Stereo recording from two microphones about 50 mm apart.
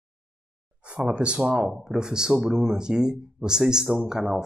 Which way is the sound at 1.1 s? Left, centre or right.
Right.